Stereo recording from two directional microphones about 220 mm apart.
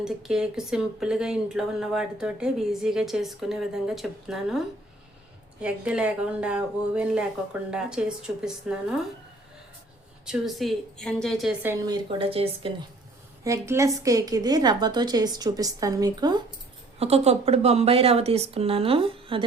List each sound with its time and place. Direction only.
0.0 s speech: 5° right (ahead or behind)
10.2 s speech: centre (ahead or behind)
12.1 s speech: 25° right (ahead or behind)
13.4 s a woman's voice: 15° right (ahead or behind)